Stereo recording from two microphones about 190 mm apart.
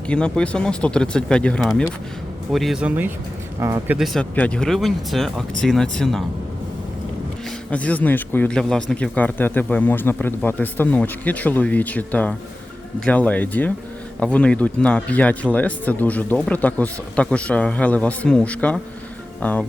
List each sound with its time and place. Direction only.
0.1 s speech: 5° left (ahead or behind); by 3.9 s 15° right (ahead or behind)
3.9 s speech: centre (ahead or behind)
7.7 s a man's voice: 5° left (ahead or behind)